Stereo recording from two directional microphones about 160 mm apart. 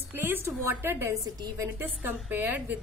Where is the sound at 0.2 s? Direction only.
15° right (ahead or behind).